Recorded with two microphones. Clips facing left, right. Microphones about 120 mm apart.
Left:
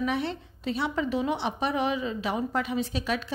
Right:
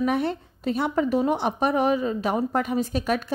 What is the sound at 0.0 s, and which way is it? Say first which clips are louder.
A woman's voice: right 5 dB; 45° right (ahead or behind).